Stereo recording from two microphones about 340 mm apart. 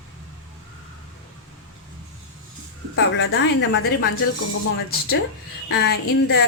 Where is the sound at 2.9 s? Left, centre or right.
Left.